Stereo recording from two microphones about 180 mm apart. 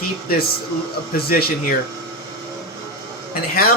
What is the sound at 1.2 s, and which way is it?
Speech, 60° left (ahead or behind).